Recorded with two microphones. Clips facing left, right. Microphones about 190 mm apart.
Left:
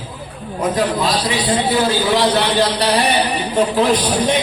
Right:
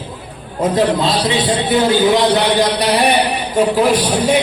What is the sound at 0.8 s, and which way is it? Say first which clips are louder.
A man's voice: right 4 dB; 25° right (ahead or behind).